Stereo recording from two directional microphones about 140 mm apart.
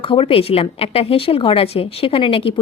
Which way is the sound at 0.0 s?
40° left (ahead or behind).